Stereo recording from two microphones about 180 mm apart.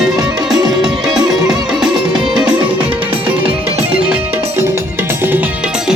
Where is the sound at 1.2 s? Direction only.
20° right (ahead or behind).